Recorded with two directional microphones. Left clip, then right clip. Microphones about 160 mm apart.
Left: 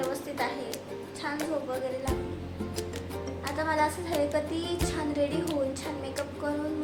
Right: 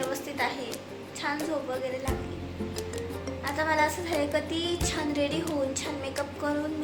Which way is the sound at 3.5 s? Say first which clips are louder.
Right 2 dB; 15° right (ahead or behind).